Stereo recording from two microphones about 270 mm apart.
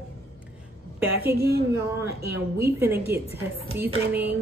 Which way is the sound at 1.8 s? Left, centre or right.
Centre.